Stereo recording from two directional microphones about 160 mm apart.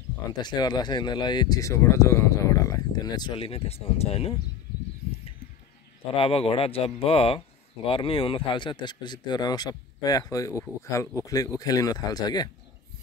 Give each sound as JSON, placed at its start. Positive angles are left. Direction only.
{"t": 0.3, "sound": "speech", "side_deg": 25}
{"t": 6.1, "sound": "speech", "side_deg": 35}